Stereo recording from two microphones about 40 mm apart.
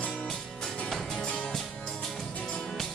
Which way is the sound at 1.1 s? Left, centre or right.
Left.